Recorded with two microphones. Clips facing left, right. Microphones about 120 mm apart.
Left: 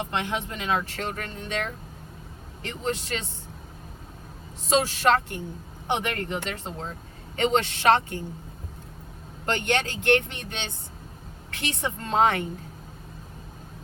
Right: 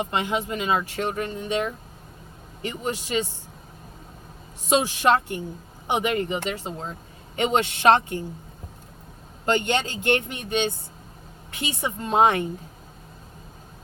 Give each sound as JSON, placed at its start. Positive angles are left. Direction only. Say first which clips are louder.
{"t": 0.0, "sound": "speech", "louder": "right 3 dB", "side_deg": -10}
{"t": 4.7, "sound": "speech", "louder": "right 2 dB", "side_deg": -15}
{"t": 9.6, "sound": "speech", "louder": "right 2 dB", "side_deg": -15}